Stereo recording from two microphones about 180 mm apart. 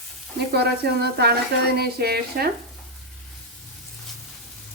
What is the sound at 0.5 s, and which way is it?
A woman's voice, 65° right (ahead or behind).